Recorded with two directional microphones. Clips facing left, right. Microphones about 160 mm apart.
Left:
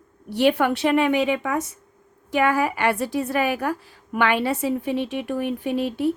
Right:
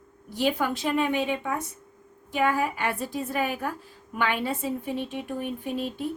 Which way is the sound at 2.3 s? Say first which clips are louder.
Left 4 dB; 80° left.